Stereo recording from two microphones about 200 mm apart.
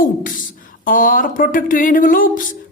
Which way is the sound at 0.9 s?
40° left (ahead or behind).